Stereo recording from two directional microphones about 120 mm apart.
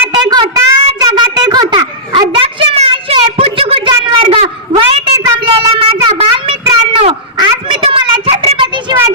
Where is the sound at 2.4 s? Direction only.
45° right (ahead or behind).